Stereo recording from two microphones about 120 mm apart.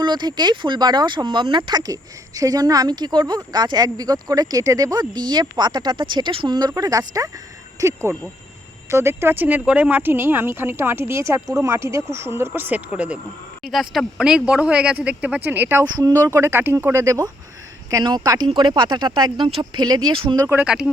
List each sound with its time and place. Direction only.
0.0 s speech: 40° right (ahead or behind); by 13.1 s 10° right (ahead or behind)
13.6 s speech: centre (ahead or behind); by 15.8 s 15° right (ahead or behind)
16.0 s speech: 30° right (ahead or behind)
20.7 s speech: 5° right (ahead or behind)